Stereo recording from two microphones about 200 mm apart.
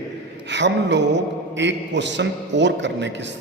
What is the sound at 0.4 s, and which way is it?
A man's voice, 60° right (ahead or behind).